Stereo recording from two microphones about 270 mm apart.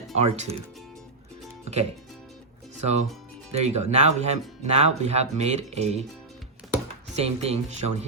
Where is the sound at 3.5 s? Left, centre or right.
Right.